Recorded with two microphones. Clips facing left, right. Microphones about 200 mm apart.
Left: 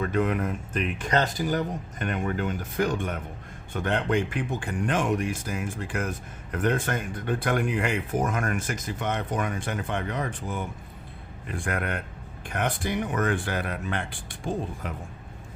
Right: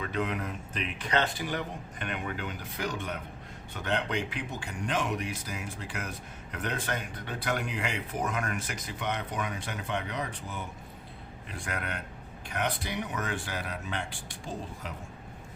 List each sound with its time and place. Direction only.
0.0 s a man's voice: 50° left (ahead or behind)